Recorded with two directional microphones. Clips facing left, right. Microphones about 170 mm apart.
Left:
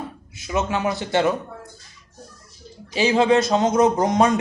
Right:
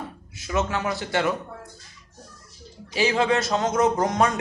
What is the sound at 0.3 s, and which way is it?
Speech, 20° left (ahead or behind).